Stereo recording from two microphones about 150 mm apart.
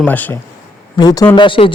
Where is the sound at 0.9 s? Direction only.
25° left (ahead or behind).